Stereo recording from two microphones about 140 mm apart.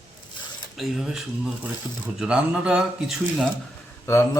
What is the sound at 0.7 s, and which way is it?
Speech, centre (ahead or behind).